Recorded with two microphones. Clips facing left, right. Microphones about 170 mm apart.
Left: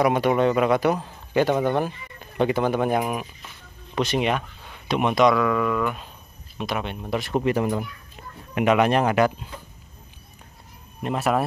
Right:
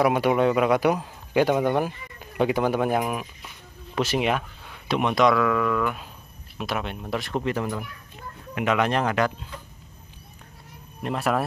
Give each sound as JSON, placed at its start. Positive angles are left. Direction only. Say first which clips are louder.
{"t": 0.0, "sound": "speech", "louder": "left 1 dB", "side_deg": -5}
{"t": 7.4, "sound": "speech", "louder": "left 5 dB", "side_deg": 15}
{"t": 11.0, "sound": "speech", "louder": "left 2 dB", "side_deg": 0}